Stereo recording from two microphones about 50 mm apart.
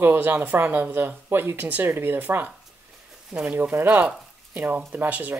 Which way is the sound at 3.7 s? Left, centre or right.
Right.